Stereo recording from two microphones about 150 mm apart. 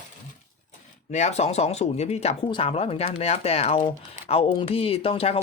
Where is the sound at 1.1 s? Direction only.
50° left (ahead or behind).